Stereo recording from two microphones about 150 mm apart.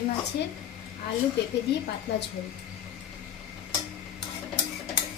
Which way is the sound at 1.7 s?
90° left.